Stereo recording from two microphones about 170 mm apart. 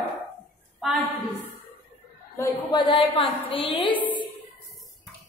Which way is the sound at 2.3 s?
20° left (ahead or behind).